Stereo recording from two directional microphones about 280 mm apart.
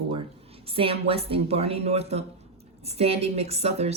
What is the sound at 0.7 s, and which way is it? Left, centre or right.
Speech, centre.